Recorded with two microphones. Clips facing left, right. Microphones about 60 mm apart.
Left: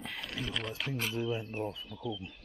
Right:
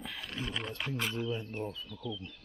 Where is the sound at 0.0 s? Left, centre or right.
Centre.